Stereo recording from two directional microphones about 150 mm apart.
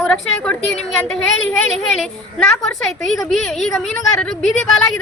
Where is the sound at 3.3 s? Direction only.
Centre (ahead or behind).